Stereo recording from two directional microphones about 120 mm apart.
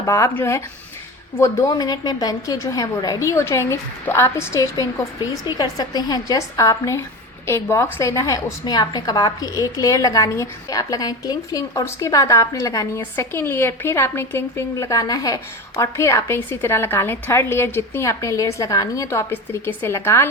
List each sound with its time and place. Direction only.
0.0 s a woman's voice: 25° left (ahead or behind)